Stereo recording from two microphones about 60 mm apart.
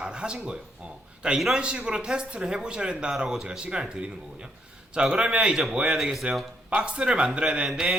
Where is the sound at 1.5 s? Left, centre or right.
Centre.